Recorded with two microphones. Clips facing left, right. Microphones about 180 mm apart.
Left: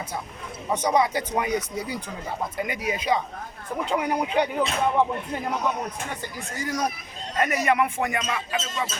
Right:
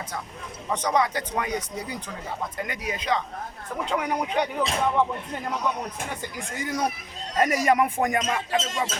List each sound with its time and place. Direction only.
0.7 s speech: 10° left (ahead or behind)
6.6 s speech: 25° right (ahead or behind)
7.3 s speech: 35° right (ahead or behind)